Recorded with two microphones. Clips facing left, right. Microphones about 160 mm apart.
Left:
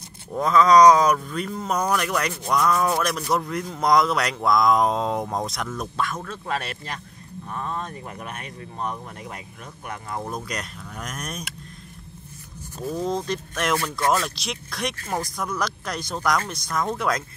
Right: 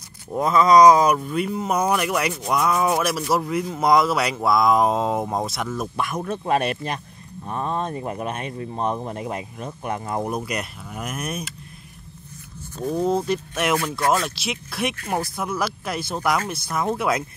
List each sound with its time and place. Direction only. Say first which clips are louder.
0.4 s speech: right 1 dB; 10° right (ahead or behind)
5.9 s speech: right 1 dB; 15° right (ahead or behind)
10.3 s speech: right 4 dB; 10° right (ahead or behind)
13.0 s speech: right 5 dB; 10° right (ahead or behind)